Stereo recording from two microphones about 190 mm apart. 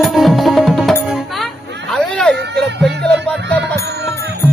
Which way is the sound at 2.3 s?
60° right (ahead or behind).